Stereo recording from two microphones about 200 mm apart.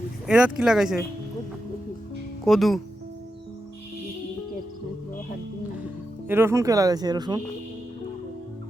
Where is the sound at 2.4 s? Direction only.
Centre (ahead or behind).